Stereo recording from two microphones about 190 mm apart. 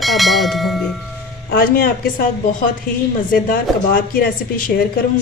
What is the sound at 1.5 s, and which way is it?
A woman's voice, 50° left (ahead or behind).